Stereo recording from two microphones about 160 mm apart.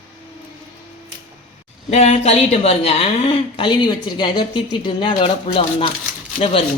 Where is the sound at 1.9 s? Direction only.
40° left (ahead or behind).